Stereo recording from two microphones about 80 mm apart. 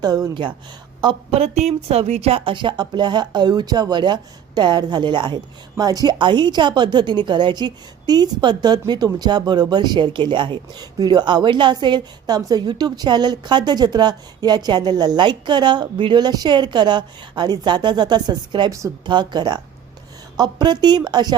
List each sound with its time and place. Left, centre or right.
0.0 s a woman's voice: right
2.5 s a woman's voice: right
5.7 s a woman's voice: right
6.1 s a woman's voice: right